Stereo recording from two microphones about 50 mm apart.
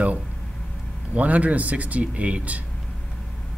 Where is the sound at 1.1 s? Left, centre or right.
Right.